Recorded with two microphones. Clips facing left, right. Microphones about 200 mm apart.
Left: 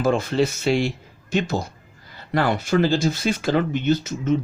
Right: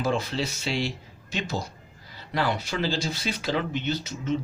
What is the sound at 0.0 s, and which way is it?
Speech, 50° left (ahead or behind).